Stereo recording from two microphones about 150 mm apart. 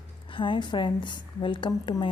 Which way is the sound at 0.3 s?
30° left (ahead or behind).